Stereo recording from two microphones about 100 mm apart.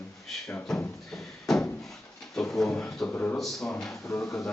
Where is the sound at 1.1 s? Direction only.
5° left (ahead or behind).